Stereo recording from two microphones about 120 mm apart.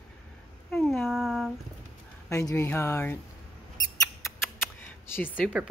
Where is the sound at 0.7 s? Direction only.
Centre (ahead or behind).